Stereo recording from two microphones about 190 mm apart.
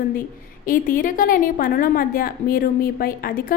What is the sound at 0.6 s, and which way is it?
A woman's voice, 45° left (ahead or behind).